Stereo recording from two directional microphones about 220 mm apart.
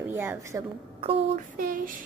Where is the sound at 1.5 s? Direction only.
40° right (ahead or behind).